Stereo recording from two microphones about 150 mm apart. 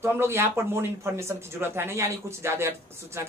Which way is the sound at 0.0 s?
15° right (ahead or behind).